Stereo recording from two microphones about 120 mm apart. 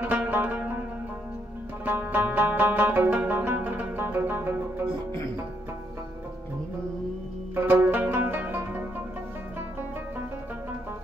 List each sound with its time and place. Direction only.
0.0 s zither: 15° right (ahead or behind)
1.9 s music: 15° right (ahead or behind)
7.5 s music: 15° right (ahead or behind)